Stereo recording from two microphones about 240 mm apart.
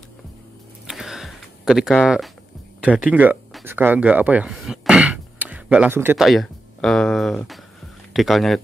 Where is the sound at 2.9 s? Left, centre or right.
Centre.